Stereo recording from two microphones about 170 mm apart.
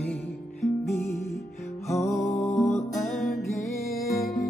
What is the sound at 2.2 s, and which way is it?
Music, 40° left (ahead or behind).